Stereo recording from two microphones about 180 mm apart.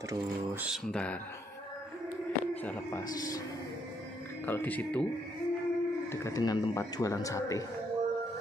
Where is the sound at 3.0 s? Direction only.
20° left (ahead or behind).